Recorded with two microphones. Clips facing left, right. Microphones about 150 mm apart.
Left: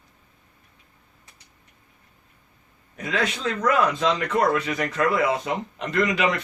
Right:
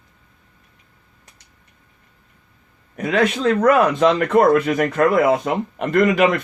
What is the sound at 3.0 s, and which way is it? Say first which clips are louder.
A man's voice: right 8 dB; 55° right (ahead or behind).